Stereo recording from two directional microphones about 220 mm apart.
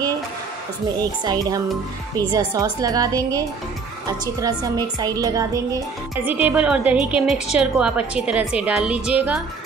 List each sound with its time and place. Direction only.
1.2 s a woman's voice: 15° right (ahead or behind)